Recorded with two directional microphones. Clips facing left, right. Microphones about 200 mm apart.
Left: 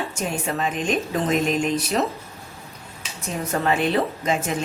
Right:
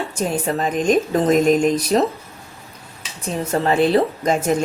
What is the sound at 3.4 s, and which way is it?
Speech, 30° right (ahead or behind).